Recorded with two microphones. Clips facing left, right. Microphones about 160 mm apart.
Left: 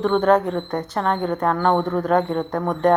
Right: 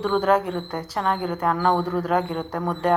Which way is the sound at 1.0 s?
40° left (ahead or behind).